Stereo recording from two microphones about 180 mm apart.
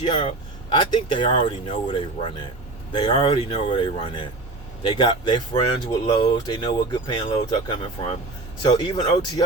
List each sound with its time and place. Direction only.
0.0 s speech: 30° left (ahead or behind)